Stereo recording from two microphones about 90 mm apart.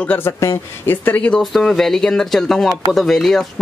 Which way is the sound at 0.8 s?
20° left (ahead or behind).